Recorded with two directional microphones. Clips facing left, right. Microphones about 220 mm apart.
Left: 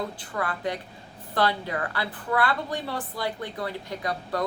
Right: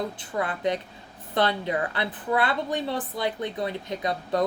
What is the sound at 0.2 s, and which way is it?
A woman's voice, 20° right (ahead or behind).